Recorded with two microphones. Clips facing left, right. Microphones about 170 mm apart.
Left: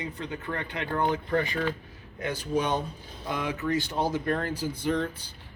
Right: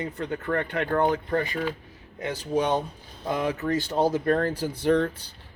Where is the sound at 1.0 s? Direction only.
35° right (ahead or behind).